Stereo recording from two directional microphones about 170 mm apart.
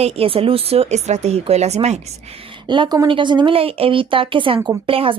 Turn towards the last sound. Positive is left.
turn(degrees=-35)  # may be behind; listen again after turning